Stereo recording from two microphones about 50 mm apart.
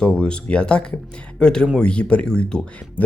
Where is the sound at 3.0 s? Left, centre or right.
Left.